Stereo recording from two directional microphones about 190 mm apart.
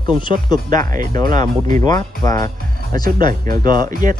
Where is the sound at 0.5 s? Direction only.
20° left (ahead or behind).